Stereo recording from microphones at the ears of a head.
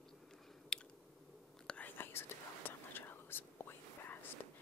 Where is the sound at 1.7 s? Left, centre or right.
Left.